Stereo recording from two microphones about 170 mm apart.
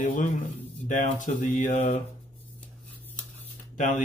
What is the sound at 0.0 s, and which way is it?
Speech, 50° left (ahead or behind).